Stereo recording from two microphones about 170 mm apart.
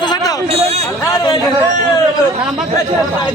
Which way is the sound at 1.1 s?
25° left (ahead or behind).